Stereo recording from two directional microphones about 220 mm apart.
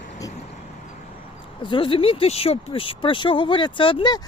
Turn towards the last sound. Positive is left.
turn(degrees=20)  # may be behind; listen again after turning